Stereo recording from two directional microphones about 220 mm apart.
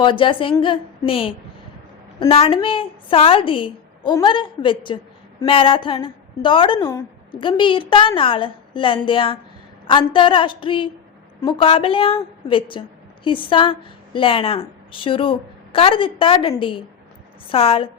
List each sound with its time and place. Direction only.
0.0 s a woman's voice: 25° left (ahead or behind)